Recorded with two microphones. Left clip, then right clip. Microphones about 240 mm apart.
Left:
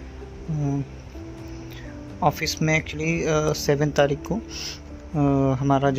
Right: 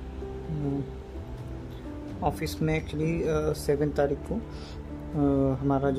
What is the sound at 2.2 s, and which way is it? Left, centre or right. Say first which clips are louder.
Speech: left 7 dB; centre.